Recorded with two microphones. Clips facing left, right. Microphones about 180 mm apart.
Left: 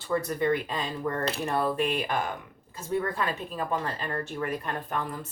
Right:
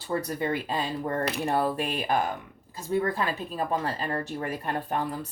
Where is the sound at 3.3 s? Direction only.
35° right (ahead or behind).